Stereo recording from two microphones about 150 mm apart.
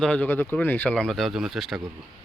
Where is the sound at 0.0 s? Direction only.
10° left (ahead or behind).